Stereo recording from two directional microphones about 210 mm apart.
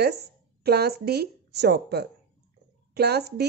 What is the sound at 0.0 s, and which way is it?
Speech, 50° right (ahead or behind).